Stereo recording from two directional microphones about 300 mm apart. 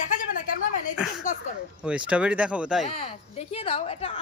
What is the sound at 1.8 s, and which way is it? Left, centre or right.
Speech, centre.